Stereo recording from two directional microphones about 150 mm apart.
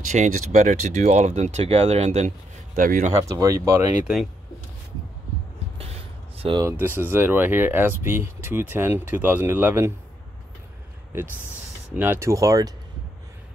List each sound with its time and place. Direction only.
0.0 s speech: 55° right (ahead or behind)
3.1 s speech: 25° right (ahead or behind)
6.3 s a sound: 40° right (ahead or behind)
6.6 s speech: 15° right (ahead or behind)
12.0 s speech: 15° right (ahead or behind)